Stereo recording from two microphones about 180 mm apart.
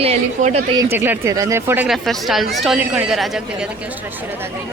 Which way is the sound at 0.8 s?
15° right (ahead or behind).